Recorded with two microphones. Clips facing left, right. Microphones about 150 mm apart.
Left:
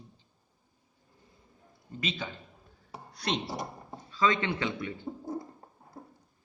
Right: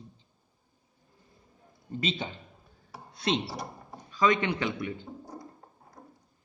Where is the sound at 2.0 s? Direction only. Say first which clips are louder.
Right 2 dB; 25° right (ahead or behind).